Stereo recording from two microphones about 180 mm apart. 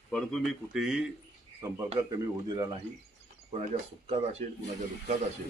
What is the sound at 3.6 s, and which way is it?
Speech, 35° right (ahead or behind).